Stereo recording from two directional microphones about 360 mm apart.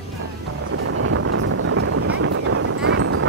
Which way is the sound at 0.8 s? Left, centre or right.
Right.